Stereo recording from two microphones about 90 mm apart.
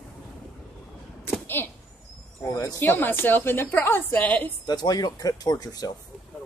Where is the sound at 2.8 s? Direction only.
20° left (ahead or behind).